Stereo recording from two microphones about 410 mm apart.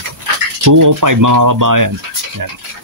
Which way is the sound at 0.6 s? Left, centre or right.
Right.